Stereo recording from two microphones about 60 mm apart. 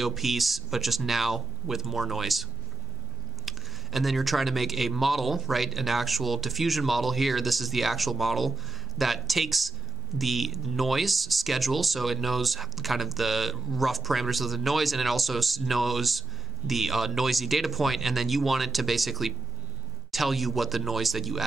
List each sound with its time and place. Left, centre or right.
0.0 s speech: centre
3.4 s speech: centre